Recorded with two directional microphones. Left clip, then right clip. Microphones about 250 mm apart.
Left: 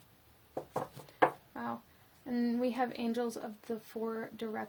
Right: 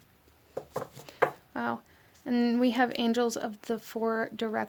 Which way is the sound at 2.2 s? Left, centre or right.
Right.